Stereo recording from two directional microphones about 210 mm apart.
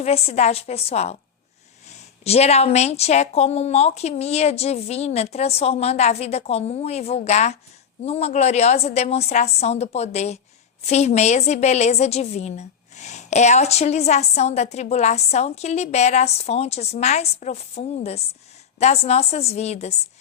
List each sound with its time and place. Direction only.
0.0 s a woman's voice: 30° left (ahead or behind)
2.2 s a woman's voice: 30° left (ahead or behind)